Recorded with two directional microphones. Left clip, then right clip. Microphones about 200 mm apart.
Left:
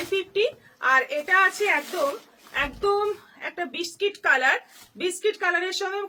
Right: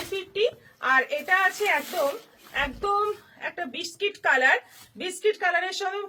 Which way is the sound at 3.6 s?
20° left (ahead or behind).